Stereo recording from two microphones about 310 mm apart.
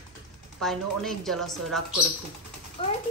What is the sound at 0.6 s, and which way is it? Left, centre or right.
A woman's voice, centre.